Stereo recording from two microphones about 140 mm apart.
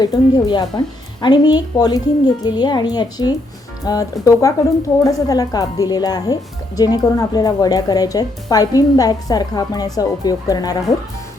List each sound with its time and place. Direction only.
0.0 s speech: 30° left (ahead or behind)